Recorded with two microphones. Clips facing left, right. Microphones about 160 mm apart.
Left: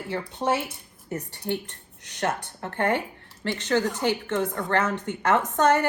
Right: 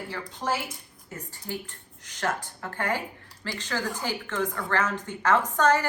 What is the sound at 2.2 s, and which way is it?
Speech, 25° left (ahead or behind).